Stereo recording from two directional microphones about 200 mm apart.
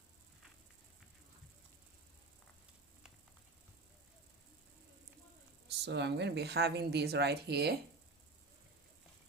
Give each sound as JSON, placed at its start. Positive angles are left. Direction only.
{"t": 5.6, "sound": "speech", "side_deg": -60}